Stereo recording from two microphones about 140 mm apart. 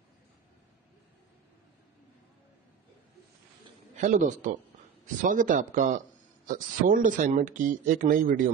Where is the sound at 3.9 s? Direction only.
60° right (ahead or behind).